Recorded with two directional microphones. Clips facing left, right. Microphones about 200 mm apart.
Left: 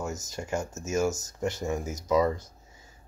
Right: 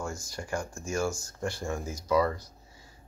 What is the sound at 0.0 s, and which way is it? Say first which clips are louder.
Speech: left 2 dB; 20° left (ahead or behind).